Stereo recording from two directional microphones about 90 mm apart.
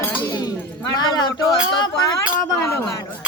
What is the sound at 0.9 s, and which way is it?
Speech, 50° left (ahead or behind).